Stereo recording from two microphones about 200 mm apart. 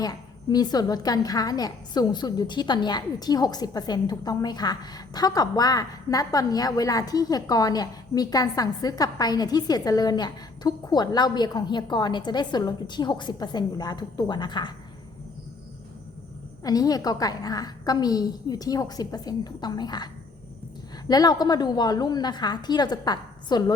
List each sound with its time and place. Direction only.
0.0 s a woman's voice: 20° left (ahead or behind)
16.6 s a woman's voice: 20° left (ahead or behind)
21.1 s a woman's voice: 20° left (ahead or behind)